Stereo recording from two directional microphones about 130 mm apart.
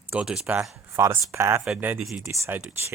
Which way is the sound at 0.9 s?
20° right (ahead or behind).